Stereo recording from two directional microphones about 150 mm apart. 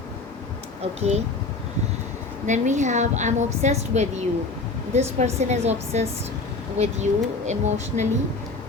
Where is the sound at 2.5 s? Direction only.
55° right (ahead or behind).